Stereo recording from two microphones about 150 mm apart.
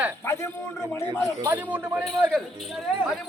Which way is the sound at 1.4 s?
15° right (ahead or behind).